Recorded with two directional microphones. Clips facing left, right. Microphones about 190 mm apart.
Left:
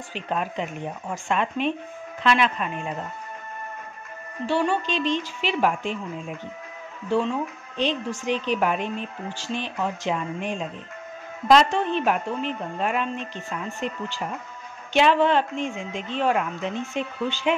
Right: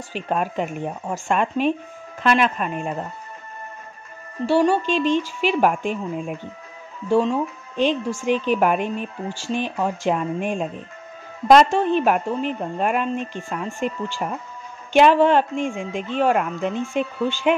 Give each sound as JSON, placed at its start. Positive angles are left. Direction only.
{"t": 0.1, "sound": "a woman's voice", "side_deg": -45}
{"t": 4.5, "sound": "a woman's voice", "side_deg": -40}